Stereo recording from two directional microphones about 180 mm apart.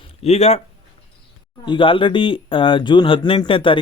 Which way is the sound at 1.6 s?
30° left (ahead or behind).